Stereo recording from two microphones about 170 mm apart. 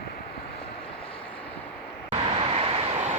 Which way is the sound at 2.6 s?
35° right (ahead or behind).